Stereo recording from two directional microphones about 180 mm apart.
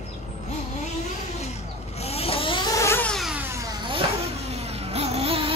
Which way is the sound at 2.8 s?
10° left (ahead or behind).